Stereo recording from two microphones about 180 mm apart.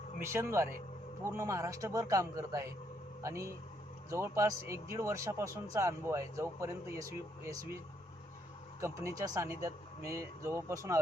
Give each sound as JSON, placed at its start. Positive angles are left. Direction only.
{"t": 0.3, "sound": "speech", "side_deg": -15}
{"t": 8.8, "sound": "speech", "side_deg": -15}